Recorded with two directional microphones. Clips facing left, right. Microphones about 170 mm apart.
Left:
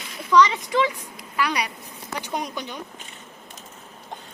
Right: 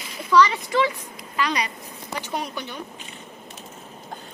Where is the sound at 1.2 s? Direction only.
10° left (ahead or behind).